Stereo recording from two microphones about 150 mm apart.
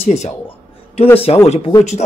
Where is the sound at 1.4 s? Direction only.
45° left (ahead or behind).